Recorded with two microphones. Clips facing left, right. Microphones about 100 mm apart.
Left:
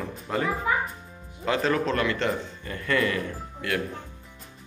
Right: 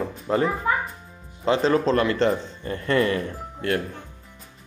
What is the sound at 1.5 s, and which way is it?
Speech, 30° right (ahead or behind).